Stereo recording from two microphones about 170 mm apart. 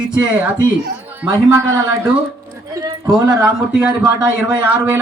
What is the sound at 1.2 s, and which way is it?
Speech, 15° right (ahead or behind).